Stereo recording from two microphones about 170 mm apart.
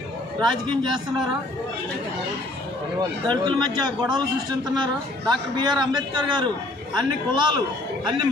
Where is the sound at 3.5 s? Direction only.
25° right (ahead or behind).